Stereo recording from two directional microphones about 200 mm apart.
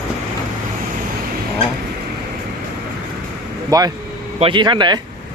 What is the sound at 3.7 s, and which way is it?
Speech, 20° right (ahead or behind).